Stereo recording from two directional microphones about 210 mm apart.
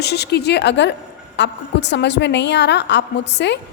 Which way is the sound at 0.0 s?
50° left (ahead or behind).